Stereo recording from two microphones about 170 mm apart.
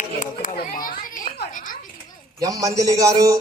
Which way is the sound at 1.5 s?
50° left (ahead or behind).